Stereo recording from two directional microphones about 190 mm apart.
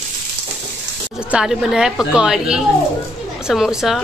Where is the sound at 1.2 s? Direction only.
5° right (ahead or behind).